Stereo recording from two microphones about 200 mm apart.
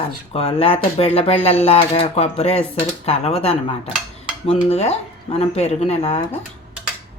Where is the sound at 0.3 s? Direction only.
30° left (ahead or behind).